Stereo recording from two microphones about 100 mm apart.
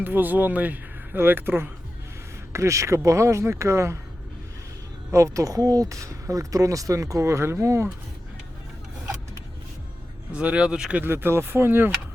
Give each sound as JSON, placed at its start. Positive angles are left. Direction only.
{"t": 0.0, "sound": "speech", "side_deg": -20}
{"t": 2.5, "sound": "speech", "side_deg": -30}
{"t": 5.1, "sound": "speech", "side_deg": -30}
{"t": 10.3, "sound": "speech", "side_deg": -10}
{"t": 11.0, "sound": "speech", "side_deg": -20}